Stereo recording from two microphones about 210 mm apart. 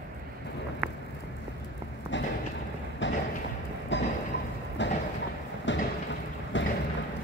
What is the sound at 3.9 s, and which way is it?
Vehicle, 55° left (ahead or behind).